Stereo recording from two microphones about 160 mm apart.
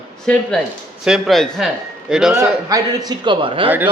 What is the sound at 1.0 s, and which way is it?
A man's voice, centre (ahead or behind).